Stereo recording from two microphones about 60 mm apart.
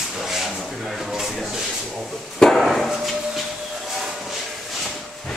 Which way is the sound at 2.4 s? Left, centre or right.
Centre.